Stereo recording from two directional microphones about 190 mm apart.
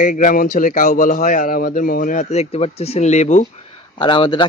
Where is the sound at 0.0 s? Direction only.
40° left (ahead or behind).